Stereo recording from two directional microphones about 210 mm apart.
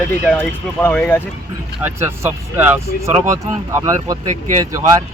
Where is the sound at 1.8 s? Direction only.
10° right (ahead or behind).